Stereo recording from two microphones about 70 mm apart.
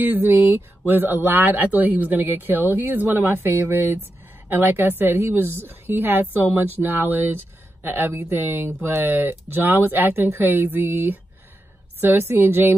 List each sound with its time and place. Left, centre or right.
0.0 s a woman's voice: right